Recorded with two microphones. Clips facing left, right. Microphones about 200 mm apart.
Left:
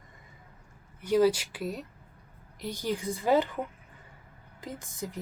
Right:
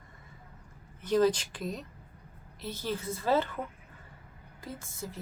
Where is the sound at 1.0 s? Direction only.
10° left (ahead or behind).